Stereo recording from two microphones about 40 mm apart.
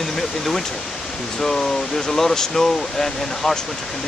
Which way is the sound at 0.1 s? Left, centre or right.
Centre.